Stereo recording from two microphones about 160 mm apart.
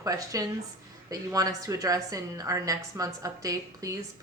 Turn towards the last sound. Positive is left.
turn(degrees=-20)  # may be behind; listen again after turning